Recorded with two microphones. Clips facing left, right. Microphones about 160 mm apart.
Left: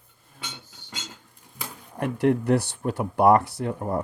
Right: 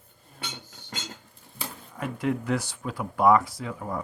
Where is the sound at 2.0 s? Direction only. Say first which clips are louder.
Left 6 dB; 65° left (ahead or behind).